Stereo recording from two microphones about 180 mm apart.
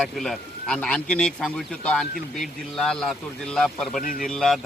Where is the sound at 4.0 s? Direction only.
50° left (ahead or behind).